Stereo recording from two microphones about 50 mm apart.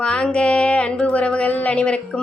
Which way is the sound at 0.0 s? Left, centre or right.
Centre.